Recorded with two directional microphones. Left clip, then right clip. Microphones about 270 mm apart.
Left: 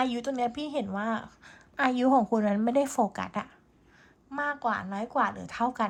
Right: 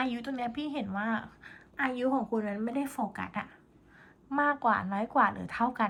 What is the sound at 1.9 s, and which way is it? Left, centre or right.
A woman's voice, left.